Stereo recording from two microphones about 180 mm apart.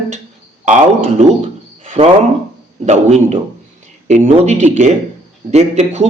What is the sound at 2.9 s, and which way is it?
Speech, 40° right (ahead or behind).